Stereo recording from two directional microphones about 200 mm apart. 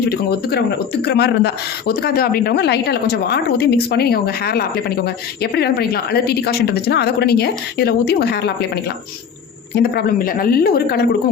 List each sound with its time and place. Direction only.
0.1 s a woman's voice: 50° left (ahead or behind)